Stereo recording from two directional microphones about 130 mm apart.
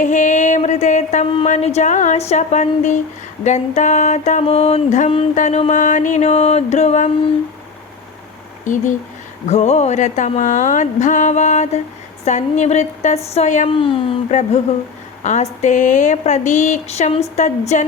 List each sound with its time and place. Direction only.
0.0 s music: 70° left (ahead or behind)
1.5 s speech: 60° left (ahead or behind)
8.6 s speech: 75° left (ahead or behind)
9.5 s speech: 60° left (ahead or behind)
13.7 s speech: 45° left (ahead or behind)
14.3 s speech: 65° left (ahead or behind)